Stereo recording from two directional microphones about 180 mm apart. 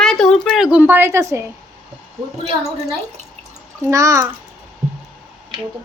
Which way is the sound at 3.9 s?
15° right (ahead or behind).